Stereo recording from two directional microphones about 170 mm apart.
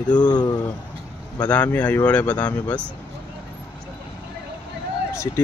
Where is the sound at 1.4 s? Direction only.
10° left (ahead or behind).